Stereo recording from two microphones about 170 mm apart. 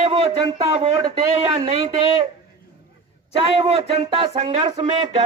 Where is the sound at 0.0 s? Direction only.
40° right (ahead or behind).